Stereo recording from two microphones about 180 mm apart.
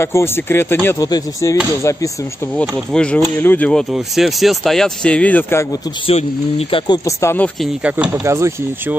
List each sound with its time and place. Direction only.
0.0 s speech: 15° left (ahead or behind)
2.5 s speech: 5° left (ahead or behind)
6.7 s speech: 20° left (ahead or behind)
7.8 s speech: 10° right (ahead or behind)